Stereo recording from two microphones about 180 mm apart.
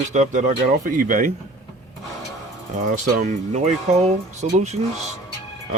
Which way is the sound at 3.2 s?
40° right (ahead or behind).